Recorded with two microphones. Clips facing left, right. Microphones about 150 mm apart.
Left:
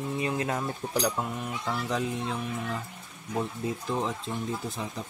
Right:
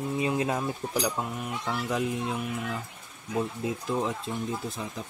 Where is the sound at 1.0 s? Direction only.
Centre (ahead or behind).